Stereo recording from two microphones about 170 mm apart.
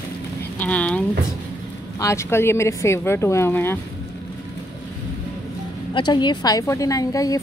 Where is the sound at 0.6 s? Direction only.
10° left (ahead or behind).